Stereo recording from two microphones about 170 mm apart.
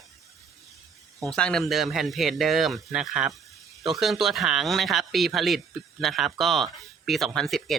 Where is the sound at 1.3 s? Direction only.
5° left (ahead or behind).